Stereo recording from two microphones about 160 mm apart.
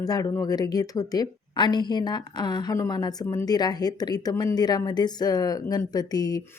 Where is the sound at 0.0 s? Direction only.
20° left (ahead or behind).